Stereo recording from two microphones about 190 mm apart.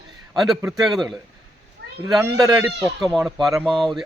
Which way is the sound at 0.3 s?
Centre (ahead or behind).